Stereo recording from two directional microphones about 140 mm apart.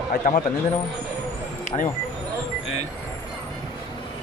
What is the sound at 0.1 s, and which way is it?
Speech, 65° left (ahead or behind).